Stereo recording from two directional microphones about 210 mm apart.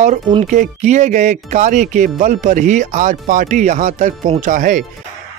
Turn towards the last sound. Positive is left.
turn(degrees=-40)  # may be behind; listen again after turning